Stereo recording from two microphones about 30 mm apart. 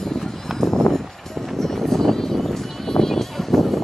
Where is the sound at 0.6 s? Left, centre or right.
Centre.